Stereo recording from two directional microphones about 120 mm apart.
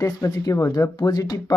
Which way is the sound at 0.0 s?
30° left (ahead or behind).